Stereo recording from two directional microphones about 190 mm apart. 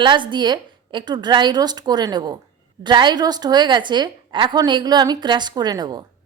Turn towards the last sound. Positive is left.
turn(degrees=-20)  # may be behind; listen again after turning